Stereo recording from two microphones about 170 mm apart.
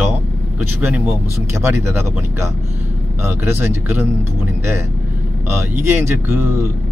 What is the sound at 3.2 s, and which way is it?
Speech, 15° right (ahead or behind).